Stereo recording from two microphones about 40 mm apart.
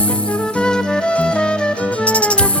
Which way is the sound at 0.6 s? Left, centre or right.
Left.